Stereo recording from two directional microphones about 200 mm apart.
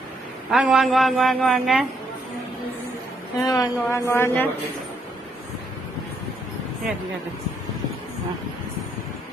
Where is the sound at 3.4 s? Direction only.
20° left (ahead or behind).